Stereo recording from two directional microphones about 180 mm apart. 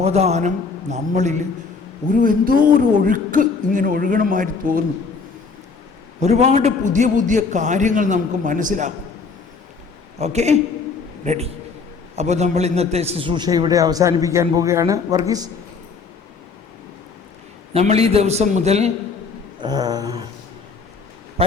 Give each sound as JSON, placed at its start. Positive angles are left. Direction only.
{"t": 0.0, "sound": "a man's voice", "side_deg": -35}
{"t": 6.2, "sound": "a man's voice", "side_deg": -35}
{"t": 10.2, "sound": "a man's voice", "side_deg": -40}
{"t": 17.7, "sound": "a man's voice", "side_deg": -35}
{"t": 19.5, "sound": "a sound", "side_deg": -25}